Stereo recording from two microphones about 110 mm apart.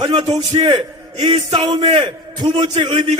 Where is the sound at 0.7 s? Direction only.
45° right (ahead or behind).